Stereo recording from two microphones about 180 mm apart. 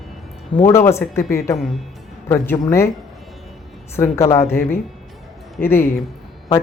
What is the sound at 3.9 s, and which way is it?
Speech, 15° left (ahead or behind).